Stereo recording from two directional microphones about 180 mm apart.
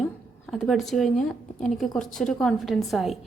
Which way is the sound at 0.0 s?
Centre (ahead or behind).